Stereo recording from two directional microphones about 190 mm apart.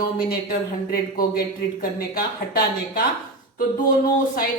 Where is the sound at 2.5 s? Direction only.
50° left (ahead or behind).